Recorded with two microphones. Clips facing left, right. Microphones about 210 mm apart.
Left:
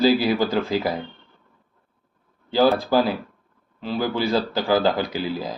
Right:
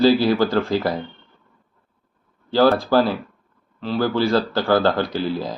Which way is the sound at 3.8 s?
10° left (ahead or behind).